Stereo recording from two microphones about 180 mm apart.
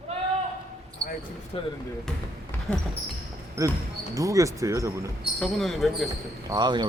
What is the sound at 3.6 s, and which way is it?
Speech, 20° right (ahead or behind).